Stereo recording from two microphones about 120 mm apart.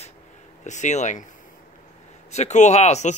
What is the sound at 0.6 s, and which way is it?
Speech, 85° left.